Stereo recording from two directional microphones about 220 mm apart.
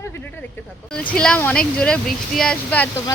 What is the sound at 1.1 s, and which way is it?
Speech, 5° left (ahead or behind).